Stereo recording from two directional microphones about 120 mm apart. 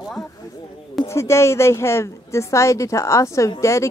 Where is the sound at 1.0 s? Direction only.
25° left (ahead or behind).